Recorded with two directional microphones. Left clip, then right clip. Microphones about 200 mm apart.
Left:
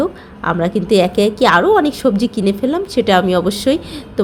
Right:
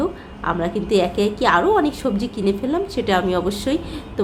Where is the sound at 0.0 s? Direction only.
30° left (ahead or behind).